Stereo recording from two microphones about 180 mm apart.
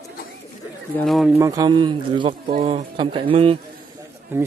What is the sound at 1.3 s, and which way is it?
Speech, 15° right (ahead or behind).